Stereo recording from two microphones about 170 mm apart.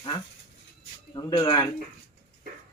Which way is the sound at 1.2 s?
25° left (ahead or behind).